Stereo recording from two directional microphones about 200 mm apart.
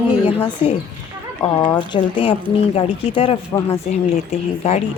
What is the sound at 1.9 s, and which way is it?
Speech, 30° left (ahead or behind).